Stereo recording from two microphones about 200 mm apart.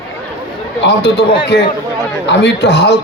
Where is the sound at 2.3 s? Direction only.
60° left (ahead or behind).